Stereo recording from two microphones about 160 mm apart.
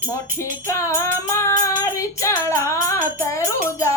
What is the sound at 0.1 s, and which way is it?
Music, 20° left (ahead or behind).